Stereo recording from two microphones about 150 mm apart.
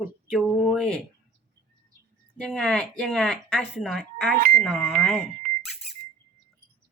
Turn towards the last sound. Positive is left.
turn(degrees=-75)  # may be behind; listen again after turning